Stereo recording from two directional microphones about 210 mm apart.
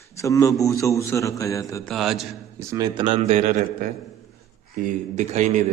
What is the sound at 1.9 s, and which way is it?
Speech, centre (ahead or behind).